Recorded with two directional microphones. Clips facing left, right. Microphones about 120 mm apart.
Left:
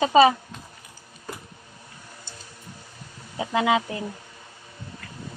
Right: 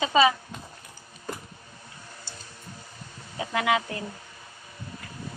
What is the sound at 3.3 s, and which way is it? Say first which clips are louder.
Speech: left 3 dB; 20° left (ahead or behind).